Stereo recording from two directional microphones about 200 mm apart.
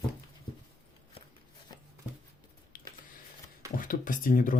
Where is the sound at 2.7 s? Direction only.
45° left (ahead or behind).